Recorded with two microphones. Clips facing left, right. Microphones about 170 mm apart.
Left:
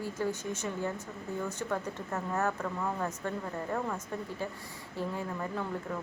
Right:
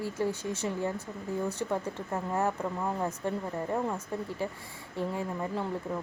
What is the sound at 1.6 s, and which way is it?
Speech, 15° right (ahead or behind).